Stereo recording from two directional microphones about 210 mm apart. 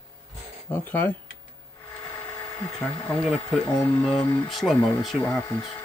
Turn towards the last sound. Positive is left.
turn(degrees=15)  # may be behind; listen again after turning